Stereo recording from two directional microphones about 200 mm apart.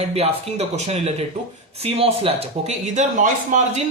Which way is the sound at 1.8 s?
30° right (ahead or behind).